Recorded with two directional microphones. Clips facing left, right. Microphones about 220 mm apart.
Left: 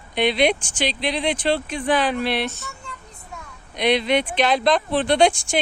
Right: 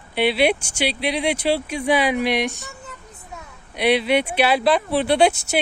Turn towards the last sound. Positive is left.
turn(degrees=-5)  # may be behind; listen again after turning